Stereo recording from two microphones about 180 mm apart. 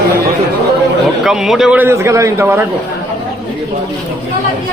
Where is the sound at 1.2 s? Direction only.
Centre (ahead or behind).